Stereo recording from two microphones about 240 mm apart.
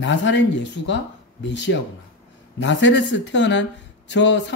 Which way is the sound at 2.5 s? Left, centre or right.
Left.